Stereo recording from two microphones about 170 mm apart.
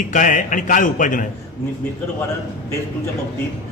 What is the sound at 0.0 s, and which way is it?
A man's voice, 50° left (ahead or behind).